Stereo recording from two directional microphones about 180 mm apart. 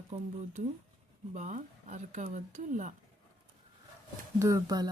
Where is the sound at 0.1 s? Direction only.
40° right (ahead or behind).